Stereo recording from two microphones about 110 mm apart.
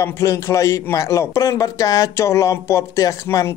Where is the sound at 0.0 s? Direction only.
30° left (ahead or behind).